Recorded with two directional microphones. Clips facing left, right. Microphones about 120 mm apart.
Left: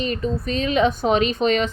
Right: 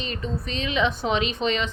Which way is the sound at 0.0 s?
45° left (ahead or behind).